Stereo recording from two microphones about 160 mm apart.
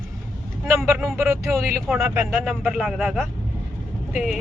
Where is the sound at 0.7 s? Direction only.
15° right (ahead or behind).